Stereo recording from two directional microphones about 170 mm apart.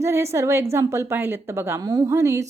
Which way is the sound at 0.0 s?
15° right (ahead or behind).